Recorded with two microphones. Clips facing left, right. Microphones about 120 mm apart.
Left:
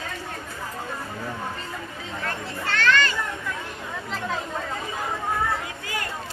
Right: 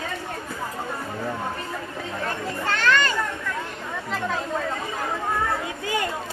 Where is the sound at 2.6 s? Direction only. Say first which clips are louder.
Even; 45° right (ahead or behind).